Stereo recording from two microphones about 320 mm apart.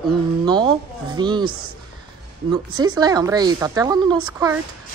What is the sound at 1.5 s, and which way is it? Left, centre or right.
Speech, right.